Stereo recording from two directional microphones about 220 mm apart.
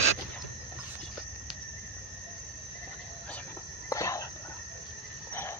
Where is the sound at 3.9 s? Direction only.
15° left (ahead or behind).